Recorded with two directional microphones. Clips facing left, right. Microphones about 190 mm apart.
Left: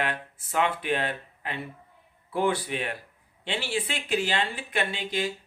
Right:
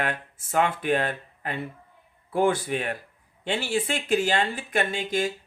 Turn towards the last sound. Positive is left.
turn(degrees=-45)  # may be behind; listen again after turning